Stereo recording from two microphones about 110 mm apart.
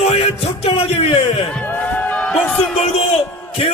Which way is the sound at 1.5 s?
10° left (ahead or behind).